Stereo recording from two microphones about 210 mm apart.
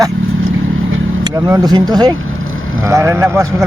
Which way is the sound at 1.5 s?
20° right (ahead or behind).